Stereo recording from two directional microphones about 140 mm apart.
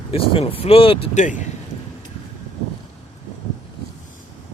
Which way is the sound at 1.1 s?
65° left (ahead or behind).